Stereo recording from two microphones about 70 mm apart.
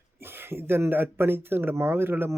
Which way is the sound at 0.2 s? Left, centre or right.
Right.